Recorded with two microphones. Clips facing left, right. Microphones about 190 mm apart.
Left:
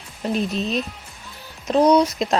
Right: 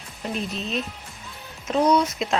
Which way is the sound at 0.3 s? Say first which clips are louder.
Left 5 dB; 35° left (ahead or behind).